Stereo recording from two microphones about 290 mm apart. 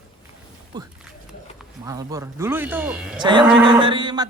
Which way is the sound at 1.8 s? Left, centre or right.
Centre.